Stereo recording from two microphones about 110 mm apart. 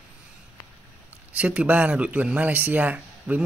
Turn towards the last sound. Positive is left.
turn(degrees=-15)  # may be behind; listen again after turning